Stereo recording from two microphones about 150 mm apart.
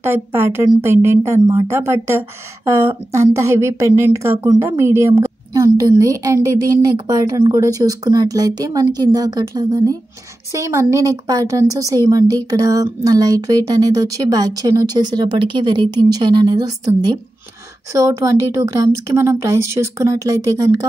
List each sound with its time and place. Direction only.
0.0 s a woman's voice: 15° right (ahead or behind)
17.9 s a woman's voice: 20° right (ahead or behind)